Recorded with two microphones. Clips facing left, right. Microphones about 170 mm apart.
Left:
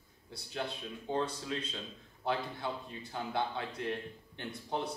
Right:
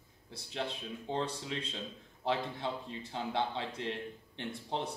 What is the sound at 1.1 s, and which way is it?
Speech, 20° right (ahead or behind).